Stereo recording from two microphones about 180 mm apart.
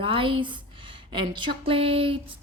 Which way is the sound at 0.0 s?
30° right (ahead or behind).